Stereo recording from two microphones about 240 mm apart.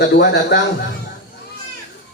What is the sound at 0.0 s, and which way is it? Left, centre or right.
Speech, left.